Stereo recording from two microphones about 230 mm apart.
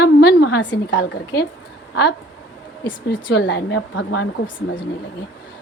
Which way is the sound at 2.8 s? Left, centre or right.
Left.